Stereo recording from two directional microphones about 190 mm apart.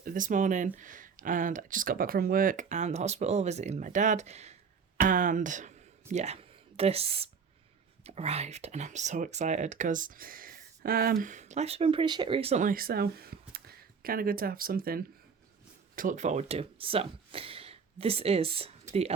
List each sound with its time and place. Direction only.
0.0 s speech: 45° right (ahead or behind)
12.6 s speech: 50° right (ahead or behind); by 18.7 s 30° right (ahead or behind)